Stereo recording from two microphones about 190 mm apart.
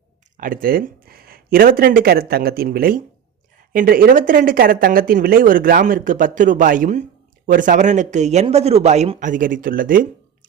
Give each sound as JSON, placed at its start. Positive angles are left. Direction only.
{"t": 0.3, "sound": "speech", "side_deg": -45}